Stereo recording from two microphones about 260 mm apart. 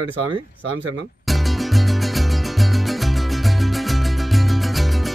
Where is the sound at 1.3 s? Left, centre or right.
Centre.